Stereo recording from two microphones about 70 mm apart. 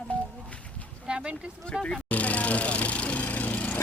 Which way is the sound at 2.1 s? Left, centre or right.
Centre.